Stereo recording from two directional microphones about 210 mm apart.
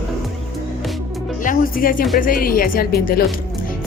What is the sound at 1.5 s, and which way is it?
A woman's voice, 40° left (ahead or behind).